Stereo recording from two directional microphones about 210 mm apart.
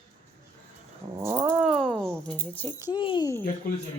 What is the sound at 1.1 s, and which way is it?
Cat, 15° right (ahead or behind).